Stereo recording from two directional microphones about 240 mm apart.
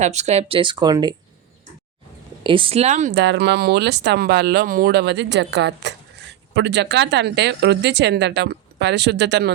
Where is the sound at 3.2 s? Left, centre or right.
Right.